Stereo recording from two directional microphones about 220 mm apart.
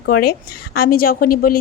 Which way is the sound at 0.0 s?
45° left (ahead or behind).